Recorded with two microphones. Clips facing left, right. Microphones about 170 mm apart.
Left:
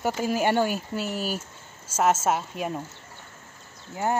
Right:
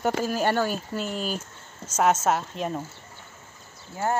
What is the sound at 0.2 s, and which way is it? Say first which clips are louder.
Speech: left 1 dB; 10° left (ahead or behind).